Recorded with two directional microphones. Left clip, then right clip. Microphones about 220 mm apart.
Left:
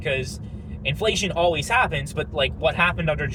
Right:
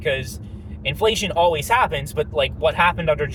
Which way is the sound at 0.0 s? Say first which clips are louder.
Right 3 dB; 25° right (ahead or behind).